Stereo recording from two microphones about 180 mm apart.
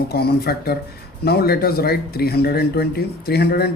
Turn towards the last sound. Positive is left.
turn(degrees=60)  # may be behind; listen again after turning